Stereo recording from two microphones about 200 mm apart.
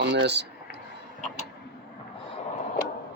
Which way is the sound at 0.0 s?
60° right (ahead or behind).